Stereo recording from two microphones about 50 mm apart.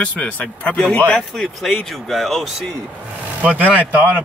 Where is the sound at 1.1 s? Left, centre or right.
Centre.